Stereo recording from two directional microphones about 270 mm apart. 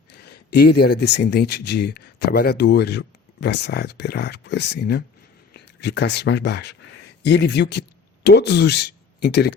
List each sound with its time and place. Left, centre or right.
0.1 s speech: left